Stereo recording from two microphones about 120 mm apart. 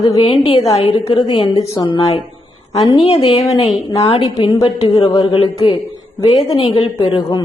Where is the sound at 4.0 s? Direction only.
50° left (ahead or behind).